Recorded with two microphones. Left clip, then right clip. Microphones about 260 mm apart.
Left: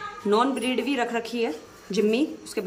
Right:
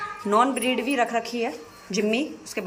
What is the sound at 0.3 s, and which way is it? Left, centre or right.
Speech, centre.